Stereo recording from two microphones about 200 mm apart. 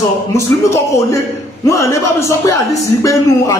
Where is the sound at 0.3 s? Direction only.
15° left (ahead or behind).